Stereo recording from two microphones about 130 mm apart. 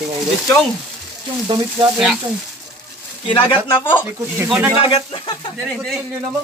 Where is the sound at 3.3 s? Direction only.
40° left (ahead or behind).